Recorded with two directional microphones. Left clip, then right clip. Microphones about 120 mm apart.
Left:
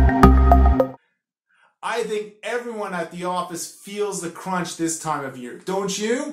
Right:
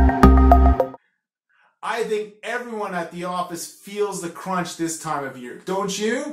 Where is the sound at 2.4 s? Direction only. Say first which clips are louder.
Left 1 dB; 25° left (ahead or behind).